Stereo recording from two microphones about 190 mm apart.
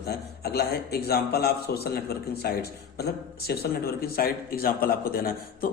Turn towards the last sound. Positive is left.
turn(degrees=50)  # may be behind; listen again after turning